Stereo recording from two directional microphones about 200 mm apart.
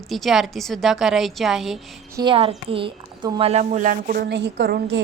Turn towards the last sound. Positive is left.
turn(degrees=-55)  # may be behind; listen again after turning